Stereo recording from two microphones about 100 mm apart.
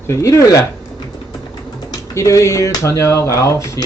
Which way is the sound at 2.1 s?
30° left (ahead or behind).